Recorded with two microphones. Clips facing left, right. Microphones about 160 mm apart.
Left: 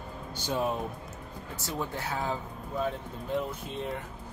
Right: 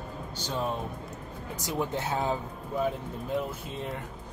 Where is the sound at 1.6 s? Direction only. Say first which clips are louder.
Right 4 dB; 20° right (ahead or behind).